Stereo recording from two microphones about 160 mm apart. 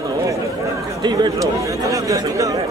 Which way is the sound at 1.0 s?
25° right (ahead or behind).